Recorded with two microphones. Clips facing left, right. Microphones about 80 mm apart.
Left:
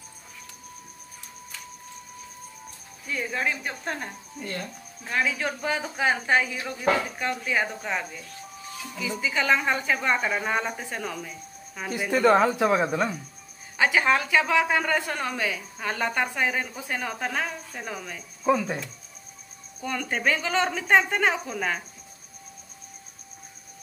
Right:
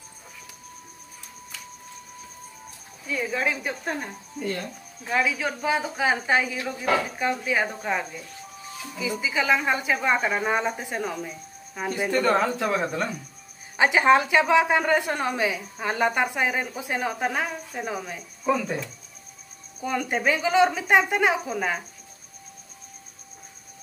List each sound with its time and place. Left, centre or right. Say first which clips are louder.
3.1 s a woman's voice: right 2 dB; centre
5.0 s a woman's voice: right 2 dB; centre
12.1 s a woman's voice: left 3 dB; centre
13.7 s a woman's voice: right 4 dB; right
18.4 s speech: left 1 dB; centre
19.8 s speech: right 2 dB; centre